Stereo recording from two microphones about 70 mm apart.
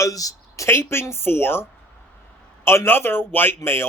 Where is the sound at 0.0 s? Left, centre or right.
Left.